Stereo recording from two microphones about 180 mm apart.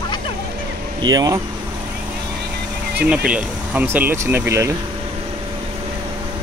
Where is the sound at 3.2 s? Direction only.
5° right (ahead or behind).